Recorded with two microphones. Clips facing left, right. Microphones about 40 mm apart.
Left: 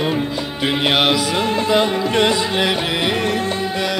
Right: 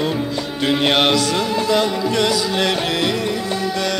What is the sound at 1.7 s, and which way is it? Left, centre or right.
Carnatic music, left.